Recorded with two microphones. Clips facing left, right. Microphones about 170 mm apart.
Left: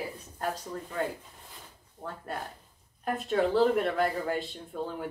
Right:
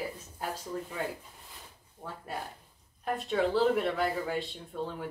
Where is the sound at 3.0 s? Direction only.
Centre (ahead or behind).